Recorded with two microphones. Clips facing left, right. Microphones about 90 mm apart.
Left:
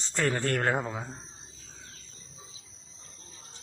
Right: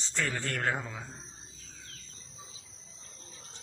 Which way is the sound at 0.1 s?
50° left (ahead or behind).